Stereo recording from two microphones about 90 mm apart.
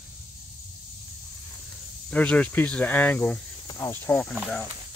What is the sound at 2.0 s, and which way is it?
Speech, 15° left (ahead or behind).